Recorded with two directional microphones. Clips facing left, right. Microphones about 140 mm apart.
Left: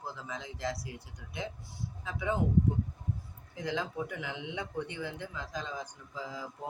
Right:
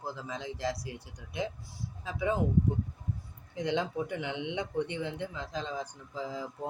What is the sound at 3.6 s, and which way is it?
Speech, 25° right (ahead or behind).